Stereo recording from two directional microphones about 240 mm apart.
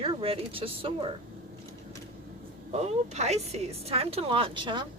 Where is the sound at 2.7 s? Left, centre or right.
Right.